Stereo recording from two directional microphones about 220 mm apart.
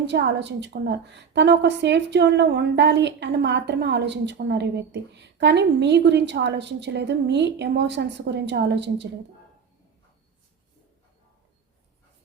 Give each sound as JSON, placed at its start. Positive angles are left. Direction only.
{"t": 0.0, "sound": "a woman's voice", "side_deg": -50}